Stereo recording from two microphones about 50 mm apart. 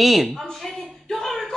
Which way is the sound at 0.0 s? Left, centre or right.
Centre.